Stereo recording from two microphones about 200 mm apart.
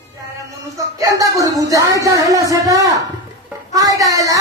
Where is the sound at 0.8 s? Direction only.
15° right (ahead or behind).